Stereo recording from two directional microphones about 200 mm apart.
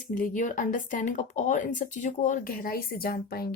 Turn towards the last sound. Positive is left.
turn(degrees=50)  # may be behind; listen again after turning